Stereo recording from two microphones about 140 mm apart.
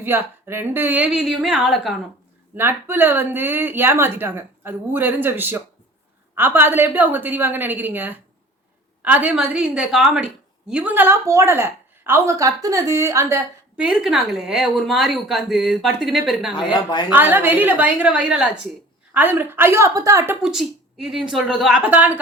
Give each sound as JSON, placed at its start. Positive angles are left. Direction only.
{"t": 0.0, "sound": "a woman's voice", "side_deg": -15}
{"t": 2.6, "sound": "a woman's voice", "side_deg": -15}
{"t": 13.7, "sound": "speech", "side_deg": -5}
{"t": 16.7, "sound": "a woman's voice", "side_deg": 35}
{"t": 17.1, "sound": "a woman's voice", "side_deg": -15}
{"t": 20.4, "sound": "speech", "side_deg": -5}